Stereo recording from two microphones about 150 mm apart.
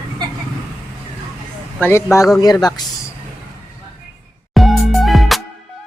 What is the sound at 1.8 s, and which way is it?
Speech, 15° left (ahead or behind).